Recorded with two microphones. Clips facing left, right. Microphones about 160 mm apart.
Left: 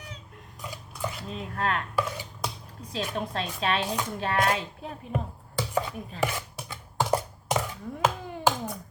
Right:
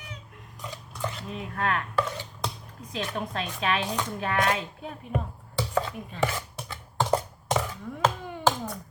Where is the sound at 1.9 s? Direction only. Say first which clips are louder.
Right 1 dB; 10° left (ahead or behind).